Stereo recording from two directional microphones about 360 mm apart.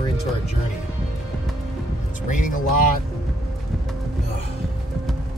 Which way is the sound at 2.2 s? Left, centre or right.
Left.